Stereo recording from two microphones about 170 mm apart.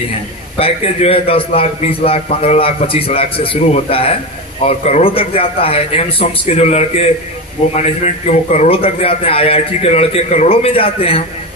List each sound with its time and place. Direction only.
0.6 s a man's voice: 35° left (ahead or behind)